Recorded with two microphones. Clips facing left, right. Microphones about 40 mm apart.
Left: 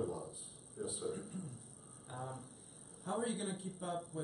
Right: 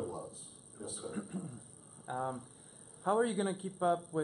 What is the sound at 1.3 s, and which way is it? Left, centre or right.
A man's voice, right.